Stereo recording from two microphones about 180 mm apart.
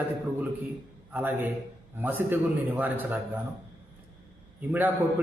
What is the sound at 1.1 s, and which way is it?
A man's voice, 10° right (ahead or behind).